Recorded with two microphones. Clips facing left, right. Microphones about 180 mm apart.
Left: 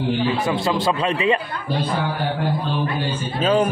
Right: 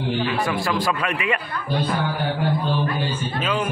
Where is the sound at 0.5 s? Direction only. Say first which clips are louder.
Left 3 dB; 25° left (ahead or behind).